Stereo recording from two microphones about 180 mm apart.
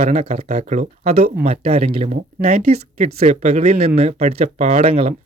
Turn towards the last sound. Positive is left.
turn(degrees=-30)  # may be behind; listen again after turning